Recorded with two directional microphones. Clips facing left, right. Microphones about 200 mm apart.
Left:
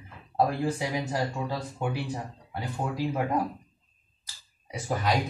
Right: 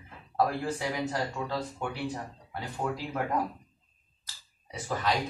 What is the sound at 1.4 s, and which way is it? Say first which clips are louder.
Speech: left 2 dB; 10° left (ahead or behind).